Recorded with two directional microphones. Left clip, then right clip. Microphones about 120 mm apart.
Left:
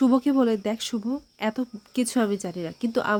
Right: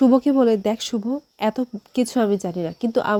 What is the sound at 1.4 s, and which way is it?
A woman's voice, 35° right (ahead or behind).